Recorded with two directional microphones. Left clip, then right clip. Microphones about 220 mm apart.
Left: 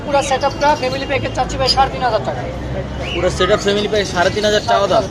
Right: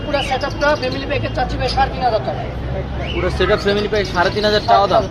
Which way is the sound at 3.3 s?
Centre (ahead or behind).